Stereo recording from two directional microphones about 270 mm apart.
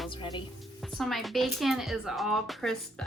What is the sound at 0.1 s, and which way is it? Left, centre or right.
Music, centre.